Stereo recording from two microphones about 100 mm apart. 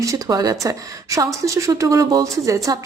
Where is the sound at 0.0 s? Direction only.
35° right (ahead or behind).